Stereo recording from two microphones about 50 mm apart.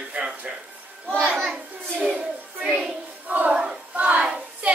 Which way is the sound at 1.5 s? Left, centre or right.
Centre.